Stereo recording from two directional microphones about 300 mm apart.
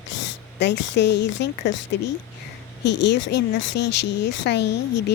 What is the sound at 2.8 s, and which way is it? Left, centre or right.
Speech, left.